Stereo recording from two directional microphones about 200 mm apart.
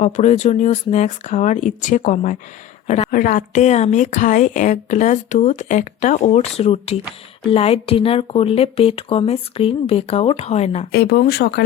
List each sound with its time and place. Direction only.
0.0 s a woman's voice: 35° left (ahead or behind)
10.9 s speech: 50° left (ahead or behind)